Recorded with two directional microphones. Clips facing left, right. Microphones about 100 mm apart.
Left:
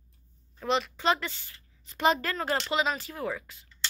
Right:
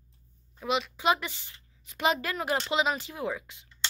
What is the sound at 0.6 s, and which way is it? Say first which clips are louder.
A woman's voice: left 1 dB; 5° right (ahead or behind).